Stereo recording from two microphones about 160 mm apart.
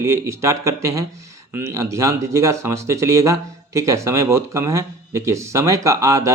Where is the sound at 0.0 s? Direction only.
15° right (ahead or behind).